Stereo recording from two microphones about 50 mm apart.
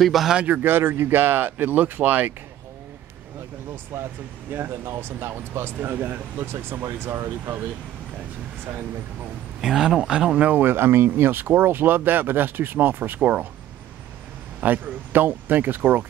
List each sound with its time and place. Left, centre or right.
0.0 s speech: centre
0.3 s speech: right
0.6 s speech: right
3.9 s speech: right
5.8 s speech: right
9.6 s speech: centre
10.5 s speech: right
14.6 s speech: right